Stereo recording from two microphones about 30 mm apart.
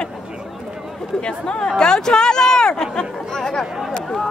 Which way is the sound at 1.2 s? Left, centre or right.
Left.